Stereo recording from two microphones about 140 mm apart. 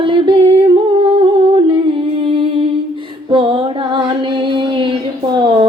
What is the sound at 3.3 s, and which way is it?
Female singing, 40° right (ahead or behind).